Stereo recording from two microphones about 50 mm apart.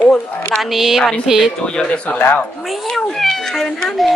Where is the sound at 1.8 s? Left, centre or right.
Left.